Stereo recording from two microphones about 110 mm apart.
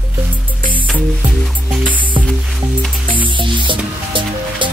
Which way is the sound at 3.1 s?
50° right (ahead or behind).